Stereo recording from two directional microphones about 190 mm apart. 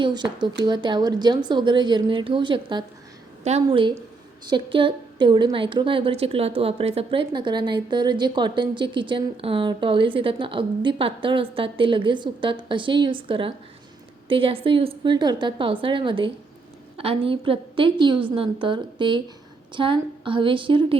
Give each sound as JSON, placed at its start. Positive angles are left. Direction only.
{"t": 0.0, "sound": "a woman's voice", "side_deg": -25}